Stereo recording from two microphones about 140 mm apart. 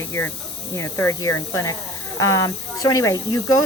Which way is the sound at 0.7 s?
20° left (ahead or behind).